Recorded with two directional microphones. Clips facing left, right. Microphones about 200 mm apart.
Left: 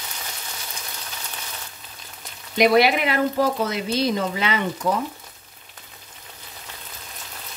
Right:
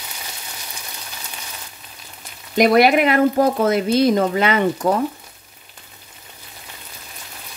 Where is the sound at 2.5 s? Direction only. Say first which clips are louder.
Right 4 dB; 45° right (ahead or behind).